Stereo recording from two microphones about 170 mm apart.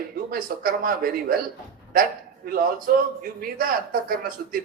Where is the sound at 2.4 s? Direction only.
55° right (ahead or behind).